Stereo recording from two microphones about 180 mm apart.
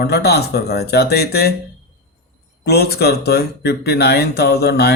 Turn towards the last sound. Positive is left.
turn(degrees=65)  # may be behind; listen again after turning